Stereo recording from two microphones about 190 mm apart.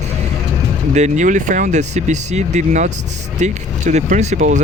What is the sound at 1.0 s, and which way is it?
Speech, 40° right (ahead or behind).